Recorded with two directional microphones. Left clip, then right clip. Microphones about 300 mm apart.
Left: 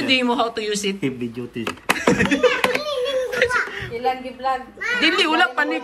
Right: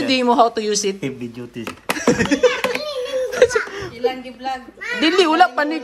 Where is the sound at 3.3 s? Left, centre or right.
Centre.